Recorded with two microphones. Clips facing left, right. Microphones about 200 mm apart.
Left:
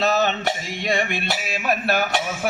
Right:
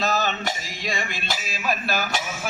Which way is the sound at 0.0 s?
60° left (ahead or behind).